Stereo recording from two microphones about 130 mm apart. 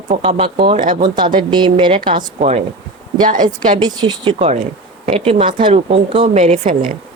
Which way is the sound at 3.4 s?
35° right (ahead or behind).